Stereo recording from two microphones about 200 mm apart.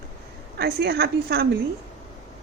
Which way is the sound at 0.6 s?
55° right (ahead or behind).